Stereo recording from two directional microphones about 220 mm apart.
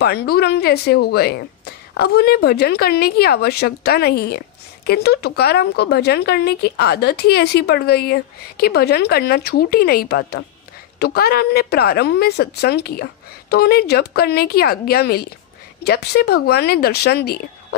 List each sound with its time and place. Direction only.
0.0 s speech: 45° left (ahead or behind)